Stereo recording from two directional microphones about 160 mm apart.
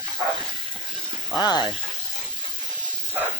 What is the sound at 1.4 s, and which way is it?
Speech, 25° left (ahead or behind).